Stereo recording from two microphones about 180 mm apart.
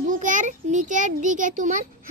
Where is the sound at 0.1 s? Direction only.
45° right (ahead or behind).